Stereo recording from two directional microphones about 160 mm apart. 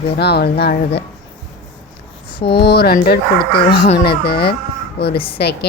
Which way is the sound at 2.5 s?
80° left.